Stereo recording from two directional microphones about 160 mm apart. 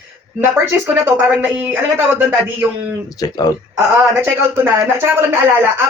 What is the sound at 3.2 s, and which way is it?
Speech, 25° left (ahead or behind).